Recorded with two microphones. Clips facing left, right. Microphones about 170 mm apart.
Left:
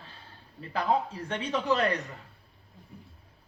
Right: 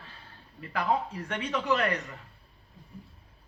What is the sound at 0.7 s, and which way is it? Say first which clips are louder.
Speech: left 1 dB; 30° left (ahead or behind).